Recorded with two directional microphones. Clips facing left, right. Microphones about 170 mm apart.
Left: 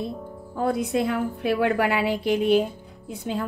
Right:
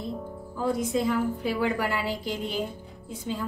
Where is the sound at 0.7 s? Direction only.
65° left (ahead or behind).